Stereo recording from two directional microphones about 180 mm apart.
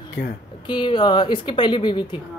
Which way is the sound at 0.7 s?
25° left (ahead or behind).